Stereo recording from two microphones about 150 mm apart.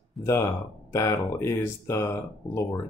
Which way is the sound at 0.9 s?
20° left (ahead or behind).